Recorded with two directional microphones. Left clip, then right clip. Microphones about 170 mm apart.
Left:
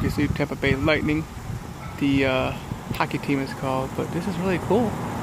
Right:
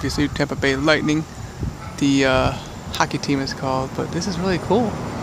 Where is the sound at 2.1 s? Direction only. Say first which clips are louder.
Right 5 dB; 15° right (ahead or behind).